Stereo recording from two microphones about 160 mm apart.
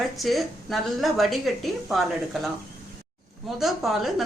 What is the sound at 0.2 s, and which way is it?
A woman's voice, centre (ahead or behind).